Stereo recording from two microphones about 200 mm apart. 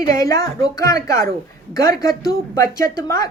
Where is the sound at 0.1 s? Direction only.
15° left (ahead or behind).